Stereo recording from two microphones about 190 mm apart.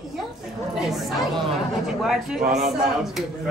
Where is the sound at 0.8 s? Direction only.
Centre (ahead or behind).